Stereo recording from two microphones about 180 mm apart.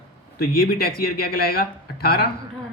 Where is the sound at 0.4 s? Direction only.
60° left (ahead or behind).